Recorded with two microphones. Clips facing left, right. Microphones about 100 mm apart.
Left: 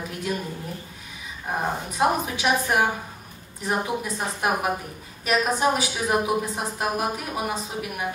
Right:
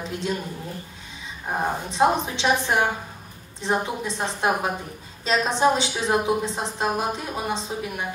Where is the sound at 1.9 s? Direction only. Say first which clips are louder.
Right 2 dB; 25° right (ahead or behind).